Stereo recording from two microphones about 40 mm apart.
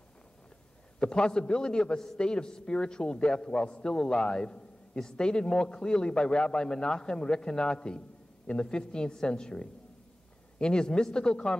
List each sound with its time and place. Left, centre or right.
0.9 s a man's voice: left